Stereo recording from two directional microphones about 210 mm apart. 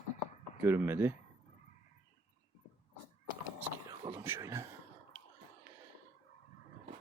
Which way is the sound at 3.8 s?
15° right (ahead or behind).